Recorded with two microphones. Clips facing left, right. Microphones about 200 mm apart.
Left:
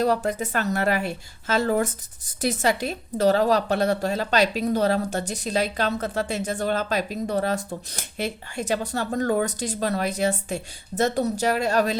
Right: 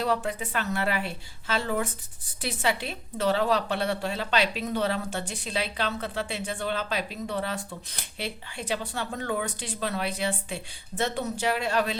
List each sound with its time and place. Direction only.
0.0 s a woman's voice: 40° left (ahead or behind)